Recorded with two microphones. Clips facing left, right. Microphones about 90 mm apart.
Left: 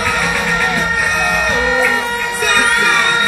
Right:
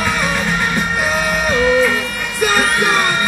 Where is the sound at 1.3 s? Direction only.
20° left (ahead or behind).